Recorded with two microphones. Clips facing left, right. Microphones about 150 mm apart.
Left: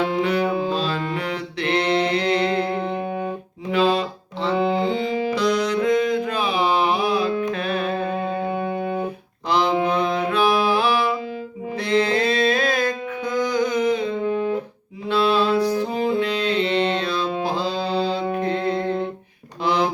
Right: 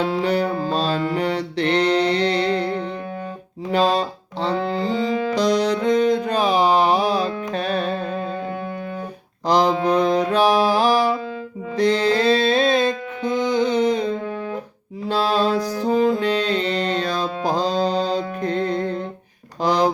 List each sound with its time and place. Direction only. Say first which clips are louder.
0.0 s music: right 1 dB; 35° right (ahead or behind)
3.7 s music: right 1 dB; 40° right (ahead or behind)
9.5 s mantra: right 3 dB; 35° right (ahead or behind)
9.8 s music: right 3 dB; 35° right (ahead or behind)
14.3 s music: left 6 dB; 20° left (ahead or behind)
15.0 s music: even; 40° right (ahead or behind)
19.6 s a sound: right 3 dB; 40° right (ahead or behind)